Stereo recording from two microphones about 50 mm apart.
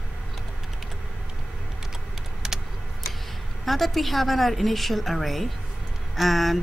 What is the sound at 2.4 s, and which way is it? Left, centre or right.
Vehicle, centre.